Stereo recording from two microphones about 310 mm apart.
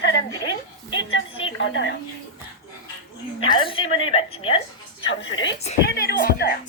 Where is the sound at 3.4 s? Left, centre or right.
Centre.